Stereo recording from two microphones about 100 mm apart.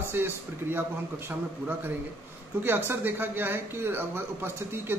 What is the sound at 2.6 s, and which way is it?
A man's voice, 20° right (ahead or behind).